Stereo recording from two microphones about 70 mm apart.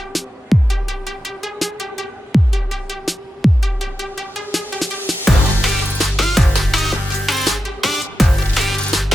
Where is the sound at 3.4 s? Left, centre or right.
Centre.